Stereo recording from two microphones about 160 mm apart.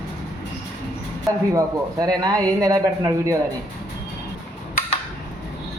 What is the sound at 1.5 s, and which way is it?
Speech, 20° right (ahead or behind).